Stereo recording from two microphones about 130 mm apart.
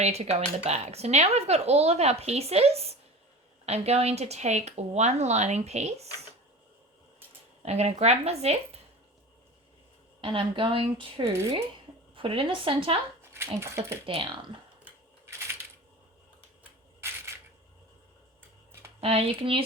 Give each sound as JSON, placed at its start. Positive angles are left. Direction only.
{"t": 0.0, "sound": "speech", "side_deg": -55}
{"t": 7.6, "sound": "speech", "side_deg": -55}
{"t": 10.2, "sound": "a woman's voice", "side_deg": -40}
{"t": 13.2, "sound": "speech", "side_deg": -20}
{"t": 14.1, "sound": "a woman's voice", "side_deg": -40}
{"t": 14.8, "sound": "a sound", "side_deg": -20}
{"t": 18.9, "sound": "speech", "side_deg": -50}